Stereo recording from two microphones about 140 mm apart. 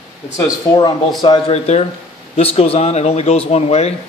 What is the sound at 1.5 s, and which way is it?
Speech, 50° left (ahead or behind).